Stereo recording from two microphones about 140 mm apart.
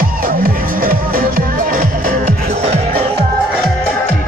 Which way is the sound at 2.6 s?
50° right (ahead or behind).